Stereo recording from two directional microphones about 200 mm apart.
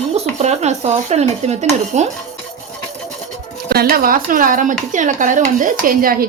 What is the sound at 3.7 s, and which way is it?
Speech, 50° right (ahead or behind).